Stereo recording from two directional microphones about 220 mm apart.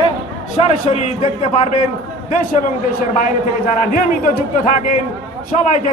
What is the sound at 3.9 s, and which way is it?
A man's voice, 40° left (ahead or behind).